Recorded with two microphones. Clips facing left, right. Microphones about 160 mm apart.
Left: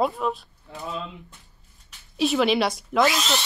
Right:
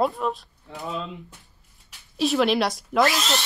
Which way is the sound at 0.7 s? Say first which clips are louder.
Right 1 dB; 20° right (ahead or behind).